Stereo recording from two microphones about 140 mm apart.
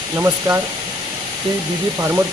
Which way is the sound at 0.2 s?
15° right (ahead or behind).